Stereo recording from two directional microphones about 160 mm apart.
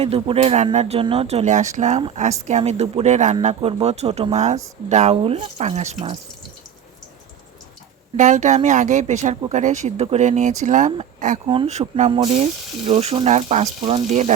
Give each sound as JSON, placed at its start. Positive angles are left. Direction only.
{"t": 0.0, "sound": "speech", "side_deg": -40}
{"t": 3.4, "sound": "speech", "side_deg": -35}
{"t": 8.1, "sound": "speech", "side_deg": -50}
{"t": 11.4, "sound": "speech", "side_deg": -35}